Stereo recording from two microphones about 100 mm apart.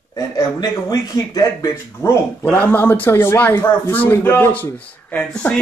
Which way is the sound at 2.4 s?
15° left (ahead or behind).